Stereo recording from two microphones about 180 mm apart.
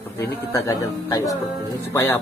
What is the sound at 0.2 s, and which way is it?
Speech, 15° left (ahead or behind).